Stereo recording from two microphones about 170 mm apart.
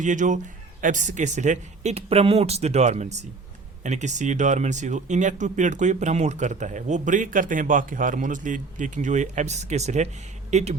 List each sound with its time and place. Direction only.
0.0 s speech: 45° right (ahead or behind)